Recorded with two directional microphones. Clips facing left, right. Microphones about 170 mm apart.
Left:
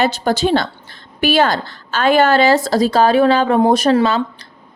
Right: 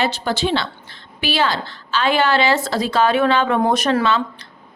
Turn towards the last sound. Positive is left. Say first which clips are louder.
# left 4 dB
turn(degrees=35)  # may be behind; listen again after turning